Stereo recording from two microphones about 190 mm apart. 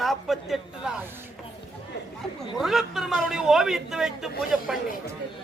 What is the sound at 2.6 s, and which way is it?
A man's voice, centre (ahead or behind).